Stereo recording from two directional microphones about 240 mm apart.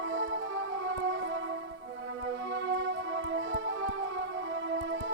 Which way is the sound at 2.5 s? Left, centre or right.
Right.